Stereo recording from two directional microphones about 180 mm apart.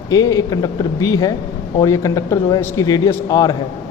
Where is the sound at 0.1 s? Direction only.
20° left (ahead or behind).